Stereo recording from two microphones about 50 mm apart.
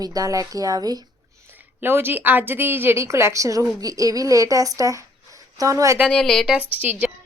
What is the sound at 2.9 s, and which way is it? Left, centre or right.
A woman's voice, right.